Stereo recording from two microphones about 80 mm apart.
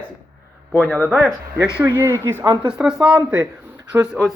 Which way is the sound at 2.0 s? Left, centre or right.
Right.